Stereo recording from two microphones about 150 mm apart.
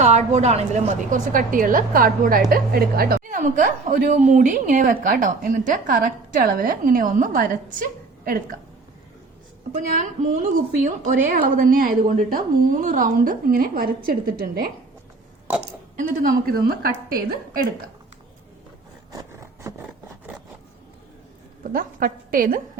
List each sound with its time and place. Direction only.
0.0 s a woman's voice: 50° right (ahead or behind); by 2.4 s 70° right (ahead or behind)
2.5 s a woman's voice: 80° right
9.7 s a woman's voice: 55° right (ahead or behind); by 14.7 s 75° right (ahead or behind)
16.0 s a woman's voice: 70° right (ahead or behind)
19.1 s a sound: 20° right (ahead or behind)
21.6 s a woman's voice: 65° right (ahead or behind)